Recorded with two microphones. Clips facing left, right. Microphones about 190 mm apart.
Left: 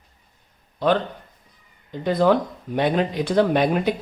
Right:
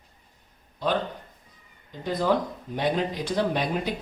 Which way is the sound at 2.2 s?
65° left (ahead or behind).